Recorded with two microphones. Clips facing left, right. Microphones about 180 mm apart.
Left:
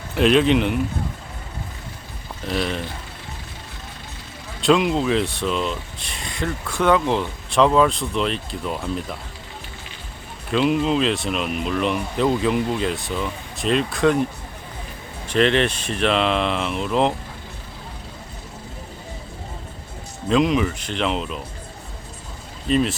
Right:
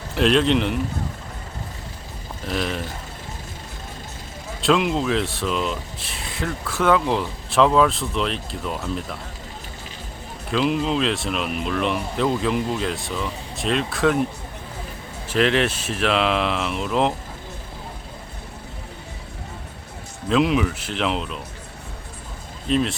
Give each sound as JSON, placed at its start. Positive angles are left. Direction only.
{"t": 0.1, "sound": "speech", "side_deg": 5}
{"t": 2.4, "sound": "speech", "side_deg": 0}
{"t": 4.6, "sound": "speech", "side_deg": 0}
{"t": 10.5, "sound": "speech", "side_deg": 0}
{"t": 15.3, "sound": "speech", "side_deg": -5}
{"t": 20.2, "sound": "speech", "side_deg": 0}
{"t": 22.6, "sound": "speech", "side_deg": 0}